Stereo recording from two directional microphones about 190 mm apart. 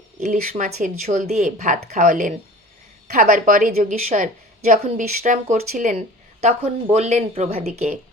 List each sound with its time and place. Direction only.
0.2 s a woman's voice: 40° right (ahead or behind)